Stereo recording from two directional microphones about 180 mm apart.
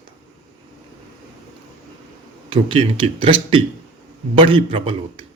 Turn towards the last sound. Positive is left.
turn(degrees=-30)  # may be behind; listen again after turning